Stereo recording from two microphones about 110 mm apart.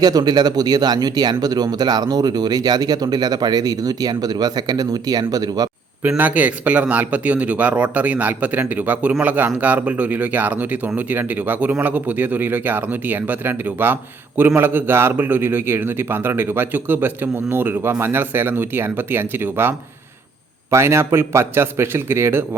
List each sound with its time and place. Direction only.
0.0 s speech: 35° right (ahead or behind)
6.0 s a man's voice: 15° right (ahead or behind)